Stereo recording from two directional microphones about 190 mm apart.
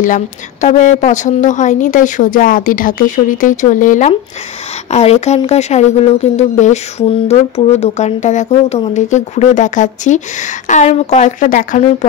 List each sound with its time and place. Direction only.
0.0 s a woman's voice: 40° left (ahead or behind)